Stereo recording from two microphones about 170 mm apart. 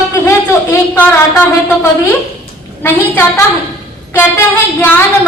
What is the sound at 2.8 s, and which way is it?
A woman's voice, 15° left (ahead or behind).